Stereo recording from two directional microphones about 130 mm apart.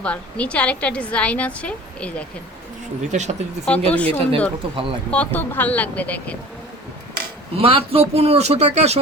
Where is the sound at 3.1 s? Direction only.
60° right (ahead or behind).